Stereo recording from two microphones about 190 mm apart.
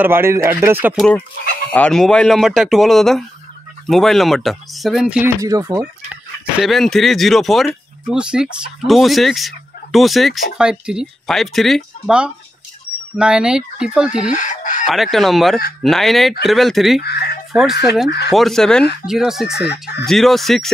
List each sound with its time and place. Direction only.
0.0 s speech: 10° right (ahead or behind)
0.9 s speech: 5° left (ahead or behind)
5.2 s speech: 20° right (ahead or behind)
6.6 s speech: centre (ahead or behind)
14.3 s chicken: 40° left (ahead or behind)
14.9 s speech: centre (ahead or behind)
17.0 s speech: 55° left (ahead or behind)
17.5 s fowl: centre (ahead or behind)
18.3 s speech: centre (ahead or behind)
19.6 s speech: 60° left (ahead or behind)
20.1 s speech: centre (ahead or behind)